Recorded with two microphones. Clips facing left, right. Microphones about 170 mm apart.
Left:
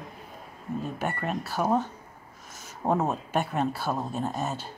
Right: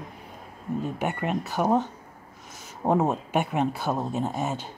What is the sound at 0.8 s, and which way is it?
Speech, 15° right (ahead or behind).